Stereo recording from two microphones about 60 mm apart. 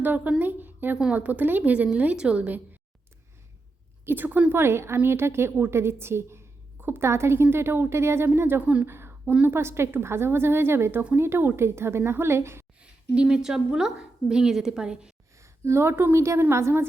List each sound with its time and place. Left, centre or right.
0.0 s a woman's voice: right
4.0 s a woman's voice: right
4.5 s a woman's voice: right
8.9 s a sound: right
9.5 s a woman's voice: right
12.8 s a woman's voice: centre
15.4 s a sound: right
16.1 s a woman's voice: right